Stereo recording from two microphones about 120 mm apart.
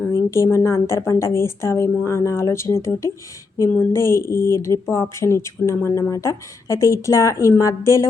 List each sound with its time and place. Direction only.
0.1 s a woman's voice: 25° left (ahead or behind)